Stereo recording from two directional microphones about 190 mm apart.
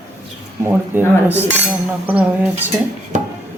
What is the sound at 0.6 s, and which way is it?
Speech, 10° right (ahead or behind).